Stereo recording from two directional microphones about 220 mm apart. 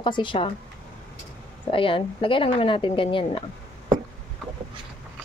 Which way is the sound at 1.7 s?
25° left (ahead or behind).